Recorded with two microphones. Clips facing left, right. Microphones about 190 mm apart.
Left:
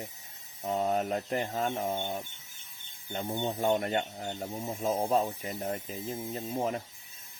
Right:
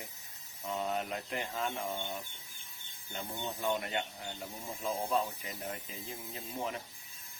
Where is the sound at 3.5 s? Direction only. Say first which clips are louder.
Left 6 dB; 45° left (ahead or behind).